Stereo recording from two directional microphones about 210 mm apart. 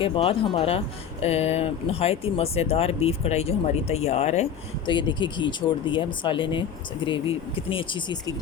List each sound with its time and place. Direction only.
0.0 s speech: 25° left (ahead or behind)